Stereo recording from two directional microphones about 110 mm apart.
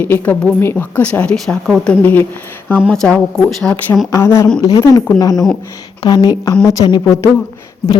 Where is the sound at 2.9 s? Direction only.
5° left (ahead or behind).